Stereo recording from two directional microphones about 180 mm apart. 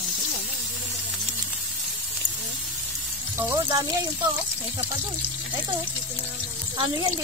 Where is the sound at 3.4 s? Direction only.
20° right (ahead or behind).